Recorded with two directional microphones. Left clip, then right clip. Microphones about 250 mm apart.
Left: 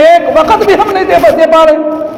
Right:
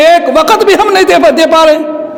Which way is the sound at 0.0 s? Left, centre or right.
Right.